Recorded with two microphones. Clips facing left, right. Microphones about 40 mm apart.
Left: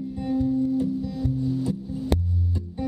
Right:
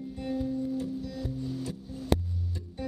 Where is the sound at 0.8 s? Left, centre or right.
Centre.